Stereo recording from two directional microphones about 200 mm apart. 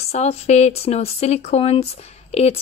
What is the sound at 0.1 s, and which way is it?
Speech, 35° left (ahead or behind).